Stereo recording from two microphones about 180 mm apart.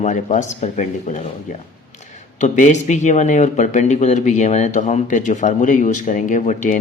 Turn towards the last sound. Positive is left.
turn(degrees=45)  # may be behind; listen again after turning